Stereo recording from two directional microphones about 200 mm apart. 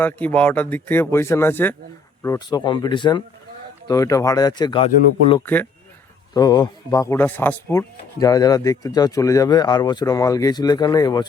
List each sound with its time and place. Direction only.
0.0 s speech: 10° left (ahead or behind)
6.3 s speech: 20° left (ahead or behind)